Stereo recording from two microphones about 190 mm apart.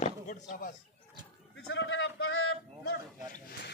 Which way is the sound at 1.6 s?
75° left (ahead or behind).